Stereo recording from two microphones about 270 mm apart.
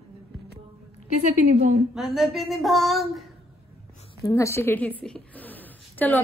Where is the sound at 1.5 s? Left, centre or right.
Right.